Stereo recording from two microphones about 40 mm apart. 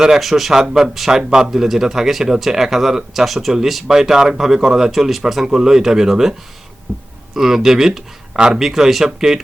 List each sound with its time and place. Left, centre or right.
0.2 s speech: centre
6.9 s speech: right
7.3 s speech: centre
8.3 s a man's voice: right
8.5 s speech: centre